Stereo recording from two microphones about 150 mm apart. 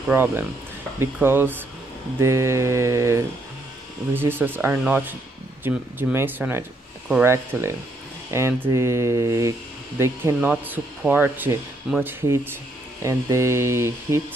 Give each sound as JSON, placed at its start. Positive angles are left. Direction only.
{"t": 0.1, "sound": "speech", "side_deg": -15}